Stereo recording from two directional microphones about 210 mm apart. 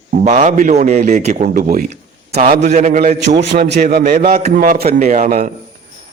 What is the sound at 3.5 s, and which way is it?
A man's voice, 50° right (ahead or behind).